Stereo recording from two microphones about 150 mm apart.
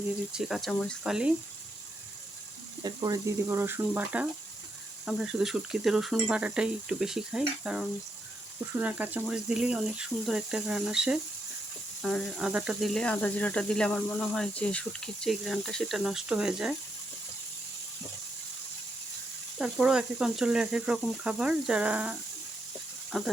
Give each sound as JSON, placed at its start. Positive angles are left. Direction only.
{"t": 0.3, "sound": "speech", "side_deg": 0}
{"t": 2.8, "sound": "speech", "side_deg": -25}
{"t": 19.5, "sound": "speech", "side_deg": -5}